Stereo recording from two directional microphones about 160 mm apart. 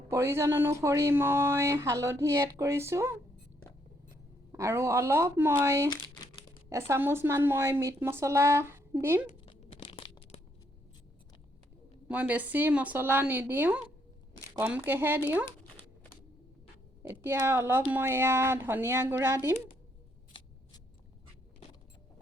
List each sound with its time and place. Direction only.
0.1 s speech: 15° right (ahead or behind)
4.5 s speech: 15° right (ahead or behind)
9.5 s a sound: 40° left (ahead or behind)
12.0 s speech: 10° right (ahead or behind)
17.0 s speech: 15° right (ahead or behind)